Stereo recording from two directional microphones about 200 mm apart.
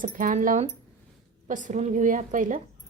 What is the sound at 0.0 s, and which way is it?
A woman's voice, 40° right (ahead or behind).